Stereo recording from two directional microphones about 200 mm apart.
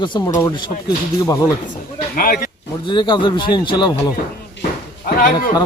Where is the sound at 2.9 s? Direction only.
20° left (ahead or behind).